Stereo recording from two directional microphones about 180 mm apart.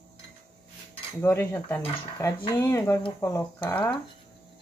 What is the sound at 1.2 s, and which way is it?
Speech, 15° left (ahead or behind).